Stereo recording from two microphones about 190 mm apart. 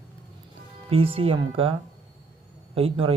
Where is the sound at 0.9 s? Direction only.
30° right (ahead or behind).